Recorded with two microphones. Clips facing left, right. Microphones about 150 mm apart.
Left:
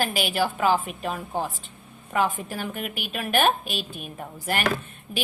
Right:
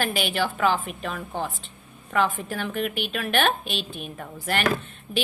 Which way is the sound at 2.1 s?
15° left (ahead or behind).